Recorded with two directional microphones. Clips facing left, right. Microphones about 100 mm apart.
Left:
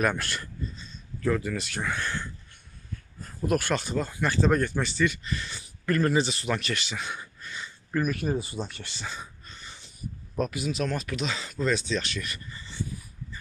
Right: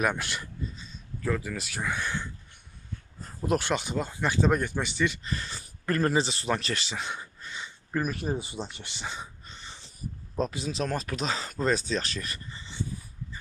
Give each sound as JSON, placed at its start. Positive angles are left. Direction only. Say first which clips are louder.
{"t": 0.0, "sound": "speech", "louder": "left 1 dB", "side_deg": -15}
{"t": 1.2, "sound": "speech", "louder": "left 3 dB", "side_deg": -5}
{"t": 3.2, "sound": "speech", "louder": "left 1 dB", "side_deg": -25}